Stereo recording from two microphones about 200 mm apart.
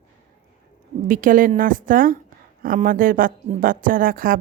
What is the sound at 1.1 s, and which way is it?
A woman's voice, 45° right (ahead or behind).